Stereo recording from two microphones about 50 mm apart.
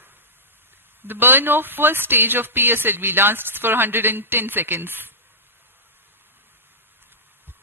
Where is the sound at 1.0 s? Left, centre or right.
Right.